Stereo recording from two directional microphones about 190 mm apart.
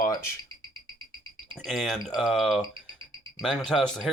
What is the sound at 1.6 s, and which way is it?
Speech, centre (ahead or behind).